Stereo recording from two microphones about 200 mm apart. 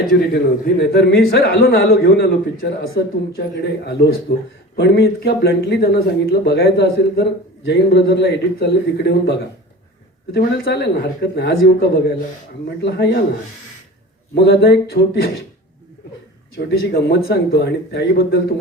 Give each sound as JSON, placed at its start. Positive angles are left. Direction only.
{"t": 0.8, "sound": "a man's voice", "side_deg": 55}
{"t": 14.3, "sound": "a man's voice", "side_deg": 55}
{"t": 16.6, "sound": "a man's voice", "side_deg": 55}